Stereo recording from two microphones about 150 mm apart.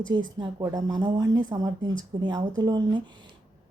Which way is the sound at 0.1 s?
30° right (ahead or behind).